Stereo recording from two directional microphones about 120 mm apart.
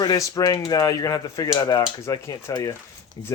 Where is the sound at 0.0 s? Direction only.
30° left (ahead or behind).